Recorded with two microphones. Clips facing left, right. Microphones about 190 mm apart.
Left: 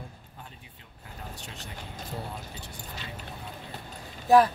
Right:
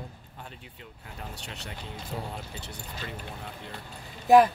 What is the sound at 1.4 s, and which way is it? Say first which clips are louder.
Speech: right 1 dB; 70° right (ahead or behind).